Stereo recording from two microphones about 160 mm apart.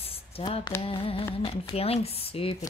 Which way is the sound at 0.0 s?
35° left (ahead or behind).